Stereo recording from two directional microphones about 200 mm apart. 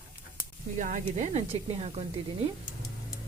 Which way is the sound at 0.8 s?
40° right (ahead or behind).